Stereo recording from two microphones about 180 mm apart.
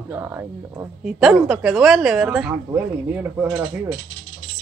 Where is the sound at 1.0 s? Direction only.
5° right (ahead or behind).